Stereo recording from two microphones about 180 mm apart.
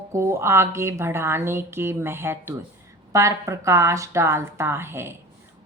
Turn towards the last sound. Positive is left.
turn(degrees=-15)  # may be behind; listen again after turning